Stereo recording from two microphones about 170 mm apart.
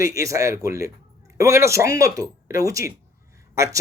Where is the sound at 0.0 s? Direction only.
20° right (ahead or behind).